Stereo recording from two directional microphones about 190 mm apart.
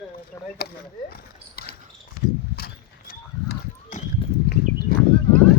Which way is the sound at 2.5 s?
55° left (ahead or behind).